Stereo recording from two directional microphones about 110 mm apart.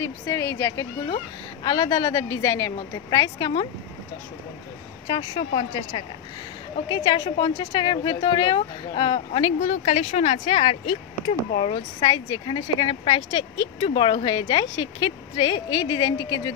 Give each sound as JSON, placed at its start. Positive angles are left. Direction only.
{"t": 0.0, "sound": "speech", "side_deg": 25}
{"t": 1.0, "sound": "speech", "side_deg": 45}
{"t": 5.0, "sound": "speech", "side_deg": 50}
{"t": 6.9, "sound": "speech", "side_deg": 45}
{"t": 10.5, "sound": "speech", "side_deg": 75}
{"t": 11.5, "sound": "speech", "side_deg": 60}